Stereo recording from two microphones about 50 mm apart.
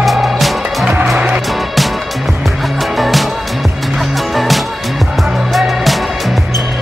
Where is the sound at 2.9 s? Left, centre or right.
Centre.